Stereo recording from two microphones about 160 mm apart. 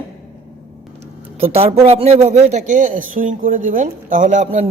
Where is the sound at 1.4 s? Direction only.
35° right (ahead or behind).